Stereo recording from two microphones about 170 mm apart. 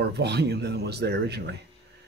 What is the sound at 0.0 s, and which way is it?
Speech, 75° right (ahead or behind).